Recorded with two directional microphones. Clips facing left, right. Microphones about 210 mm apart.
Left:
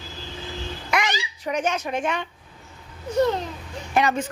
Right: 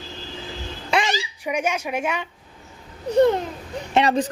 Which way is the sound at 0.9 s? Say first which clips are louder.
Right 3 dB; 30° right (ahead or behind).